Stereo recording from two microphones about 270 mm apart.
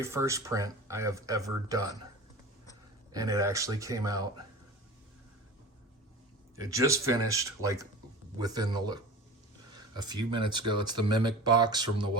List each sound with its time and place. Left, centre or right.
0.0 s speech: centre
3.1 s speech: centre
6.6 s speech: centre